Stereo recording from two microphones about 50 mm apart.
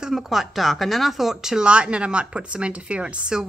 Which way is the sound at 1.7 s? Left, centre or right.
Right.